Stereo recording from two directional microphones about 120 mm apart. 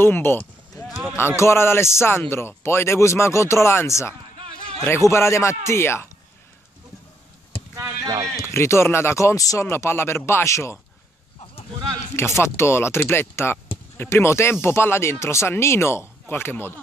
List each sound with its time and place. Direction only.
0.0 s sheep: 20° left (ahead or behind)
1.1 s speech: 20° left (ahead or behind)
7.7 s a sound: 30° right (ahead or behind)
8.4 s speech: 20° left (ahead or behind)
12.2 s speech: 20° left (ahead or behind)